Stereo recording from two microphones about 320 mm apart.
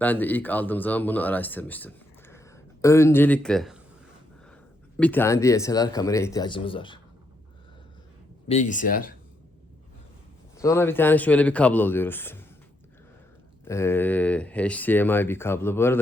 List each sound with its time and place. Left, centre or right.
0.0 s speech: centre
4.9 s speech: centre
8.4 s speech: left
10.6 s speech: centre
13.7 s speech: centre